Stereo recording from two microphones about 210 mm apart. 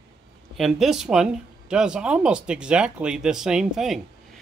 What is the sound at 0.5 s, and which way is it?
Speech, centre (ahead or behind).